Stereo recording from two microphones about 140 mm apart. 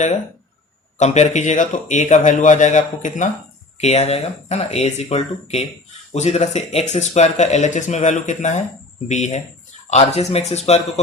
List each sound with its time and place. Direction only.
0.9 s speech: 55° left (ahead or behind)